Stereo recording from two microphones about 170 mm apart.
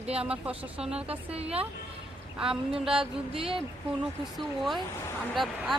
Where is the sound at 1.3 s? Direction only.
35° right (ahead or behind).